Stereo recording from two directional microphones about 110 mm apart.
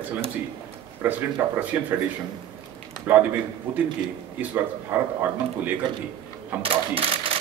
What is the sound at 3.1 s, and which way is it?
Speech, 15° right (ahead or behind).